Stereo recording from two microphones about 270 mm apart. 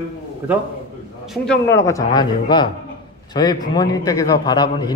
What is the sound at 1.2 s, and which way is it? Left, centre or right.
A man's voice, centre.